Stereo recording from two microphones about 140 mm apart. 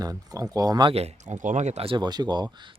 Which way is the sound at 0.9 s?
55° right (ahead or behind).